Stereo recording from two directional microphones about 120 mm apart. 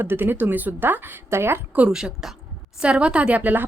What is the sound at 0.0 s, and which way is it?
A woman's voice, 15° right (ahead or behind).